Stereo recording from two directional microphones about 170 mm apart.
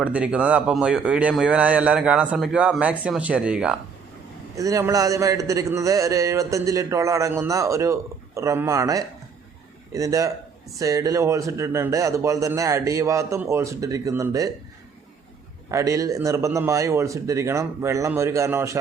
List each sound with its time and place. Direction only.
0.0 s speech: 10° right (ahead or behind)
4.5 s a man's voice: 20° right (ahead or behind)
15.7 s speech: 20° right (ahead or behind)